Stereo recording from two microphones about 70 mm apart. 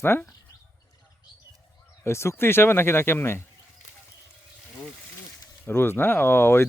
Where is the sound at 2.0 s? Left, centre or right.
Left.